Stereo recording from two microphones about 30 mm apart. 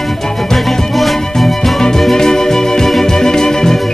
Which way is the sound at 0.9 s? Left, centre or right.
Centre.